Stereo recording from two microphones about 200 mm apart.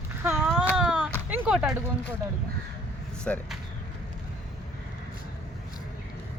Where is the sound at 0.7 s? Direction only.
5° right (ahead or behind).